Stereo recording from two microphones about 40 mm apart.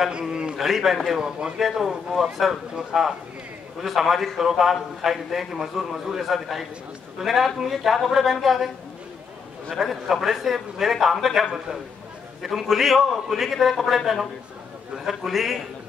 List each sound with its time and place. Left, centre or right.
0.2 s a man's voice: centre
0.6 s a man's voice: centre
9.8 s a man's voice: centre